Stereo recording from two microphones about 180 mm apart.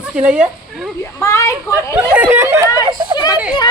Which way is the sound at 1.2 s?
15° left (ahead or behind).